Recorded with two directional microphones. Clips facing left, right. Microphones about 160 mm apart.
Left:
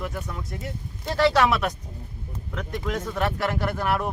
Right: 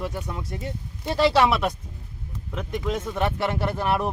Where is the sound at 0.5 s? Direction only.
25° right (ahead or behind).